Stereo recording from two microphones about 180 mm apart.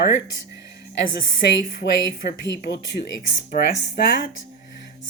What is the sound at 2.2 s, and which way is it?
Speech, 55° left (ahead or behind).